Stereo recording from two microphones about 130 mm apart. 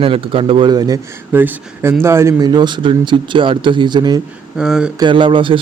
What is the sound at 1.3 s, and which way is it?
Speech, 15° right (ahead or behind).